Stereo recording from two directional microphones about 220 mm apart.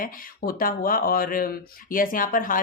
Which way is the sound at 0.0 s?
40° left (ahead or behind).